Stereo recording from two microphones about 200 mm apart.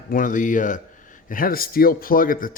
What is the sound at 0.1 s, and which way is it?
Speech, 40° left (ahead or behind).